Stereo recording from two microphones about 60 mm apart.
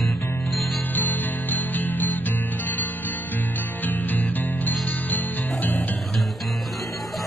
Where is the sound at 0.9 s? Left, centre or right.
Left.